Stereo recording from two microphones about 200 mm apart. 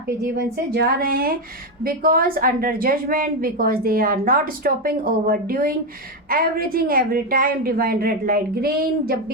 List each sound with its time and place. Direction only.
0.3 s a woman's voice: 50° right (ahead or behind)